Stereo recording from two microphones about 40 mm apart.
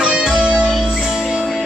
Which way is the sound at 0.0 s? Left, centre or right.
Centre.